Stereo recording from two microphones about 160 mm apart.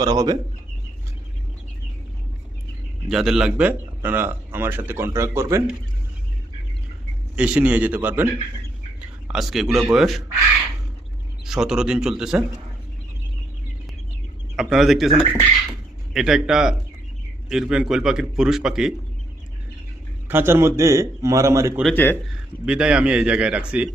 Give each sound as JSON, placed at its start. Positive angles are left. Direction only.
{"t": 0.0, "sound": "a man's voice", "side_deg": -25}
{"t": 3.1, "sound": "speech", "side_deg": -5}
{"t": 7.3, "sound": "a man's voice", "side_deg": -10}
{"t": 11.4, "sound": "a man's voice", "side_deg": -5}
{"t": 14.5, "sound": "a man's voice", "side_deg": -5}
{"t": 20.2, "sound": "a man's voice", "side_deg": -15}
{"t": 21.9, "sound": "a man's voice", "side_deg": 10}
{"t": 22.6, "sound": "speech", "side_deg": -5}